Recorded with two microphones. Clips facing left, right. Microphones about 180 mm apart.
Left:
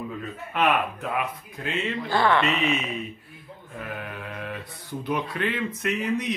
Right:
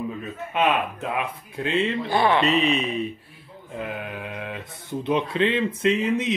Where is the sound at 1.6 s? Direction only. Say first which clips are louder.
Right 5 dB; 30° right (ahead or behind).